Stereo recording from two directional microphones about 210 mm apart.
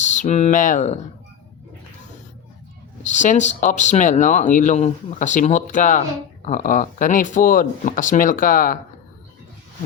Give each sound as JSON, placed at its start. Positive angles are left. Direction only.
{"t": 0.0, "sound": "speech", "side_deg": 35}
{"t": 3.0, "sound": "speech", "side_deg": 35}